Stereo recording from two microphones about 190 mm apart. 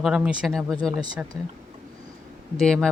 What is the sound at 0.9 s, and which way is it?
Speech, 20° right (ahead or behind).